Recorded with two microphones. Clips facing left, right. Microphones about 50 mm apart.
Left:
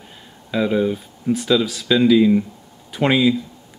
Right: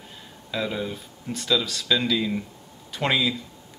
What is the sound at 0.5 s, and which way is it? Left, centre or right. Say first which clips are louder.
Speech: left 9 dB; centre.